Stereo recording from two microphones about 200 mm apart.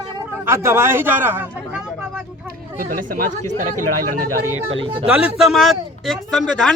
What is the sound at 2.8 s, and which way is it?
Speech, 45° right (ahead or behind).